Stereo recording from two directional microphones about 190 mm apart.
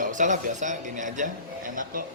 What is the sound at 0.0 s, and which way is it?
Speech, 40° right (ahead or behind).